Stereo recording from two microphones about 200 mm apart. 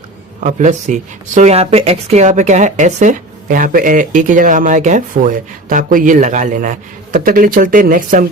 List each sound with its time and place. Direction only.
0.4 s speech: 35° right (ahead or behind)